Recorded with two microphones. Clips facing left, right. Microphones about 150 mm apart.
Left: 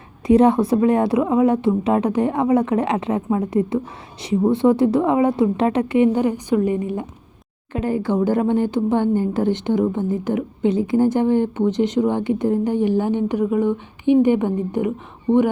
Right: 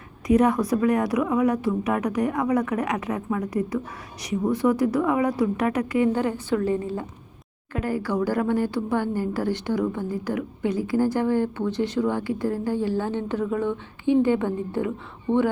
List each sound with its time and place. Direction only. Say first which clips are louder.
0.3 s a woman's voice: left 5 dB; 30° left (ahead or behind)